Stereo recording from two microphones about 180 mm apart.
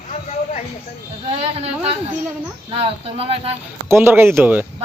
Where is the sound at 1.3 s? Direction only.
35° right (ahead or behind).